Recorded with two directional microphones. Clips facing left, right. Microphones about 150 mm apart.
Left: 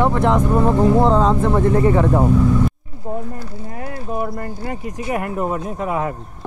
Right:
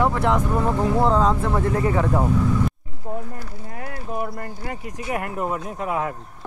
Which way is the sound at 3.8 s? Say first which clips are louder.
Left 4 dB; 30° left (ahead or behind).